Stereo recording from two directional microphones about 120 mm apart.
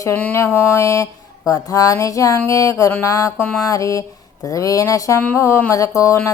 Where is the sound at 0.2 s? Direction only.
15° left (ahead or behind).